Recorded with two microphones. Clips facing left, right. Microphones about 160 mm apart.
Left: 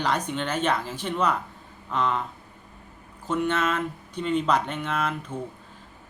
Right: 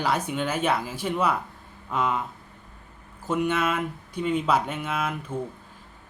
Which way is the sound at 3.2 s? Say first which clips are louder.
Even; 10° right (ahead or behind).